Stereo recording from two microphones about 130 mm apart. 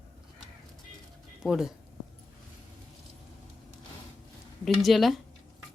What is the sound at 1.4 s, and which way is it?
Speech, 5° right (ahead or behind).